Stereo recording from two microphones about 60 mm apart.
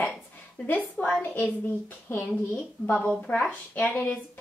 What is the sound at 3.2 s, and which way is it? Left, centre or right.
Speech, left.